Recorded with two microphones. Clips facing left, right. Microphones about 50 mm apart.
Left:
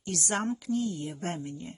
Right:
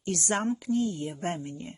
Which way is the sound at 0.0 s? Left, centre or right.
Right.